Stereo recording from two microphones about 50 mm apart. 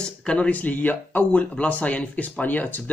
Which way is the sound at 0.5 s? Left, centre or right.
Left.